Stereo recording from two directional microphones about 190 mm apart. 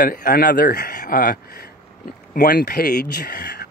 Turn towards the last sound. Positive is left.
turn(degrees=50)  # may be behind; listen again after turning